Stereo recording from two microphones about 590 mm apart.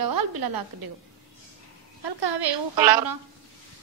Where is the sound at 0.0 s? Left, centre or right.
Right.